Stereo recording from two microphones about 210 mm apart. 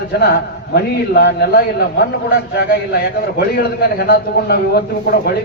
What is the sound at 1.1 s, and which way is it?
Speech, 50° left (ahead or behind).